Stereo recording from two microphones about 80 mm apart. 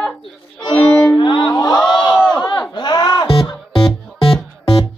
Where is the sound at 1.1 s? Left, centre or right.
Left.